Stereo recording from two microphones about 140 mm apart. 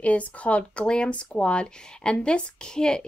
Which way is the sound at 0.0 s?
10° left (ahead or behind).